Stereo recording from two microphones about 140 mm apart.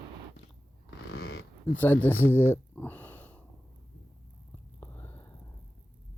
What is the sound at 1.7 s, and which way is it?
Speech, 15° left (ahead or behind).